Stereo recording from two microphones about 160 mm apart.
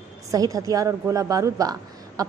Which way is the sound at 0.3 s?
20° right (ahead or behind).